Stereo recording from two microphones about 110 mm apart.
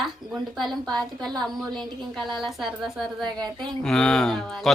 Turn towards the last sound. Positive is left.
turn(degrees=5)  # may be behind; listen again after turning